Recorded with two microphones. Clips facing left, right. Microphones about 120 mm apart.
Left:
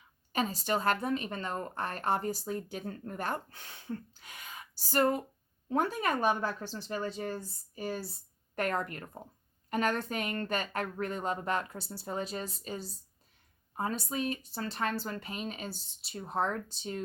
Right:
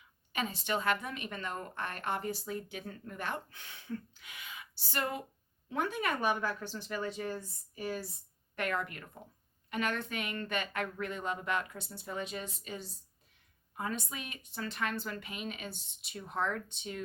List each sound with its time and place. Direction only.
0.3 s a woman's voice: 35° left (ahead or behind)